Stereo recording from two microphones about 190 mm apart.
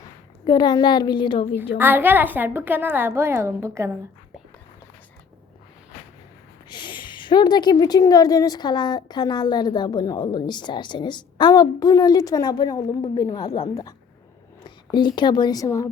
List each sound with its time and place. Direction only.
0.4 s speech: 20° left (ahead or behind)
1.8 s a woman's voice: 10° right (ahead or behind)
6.7 s a woman's voice: 25° left (ahead or behind)